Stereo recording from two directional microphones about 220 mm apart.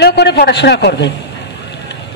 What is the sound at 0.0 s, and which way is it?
A man's voice, 50° left (ahead or behind).